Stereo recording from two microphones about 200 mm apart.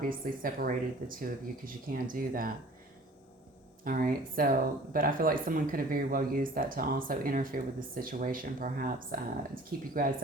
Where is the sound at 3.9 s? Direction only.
45° right (ahead or behind).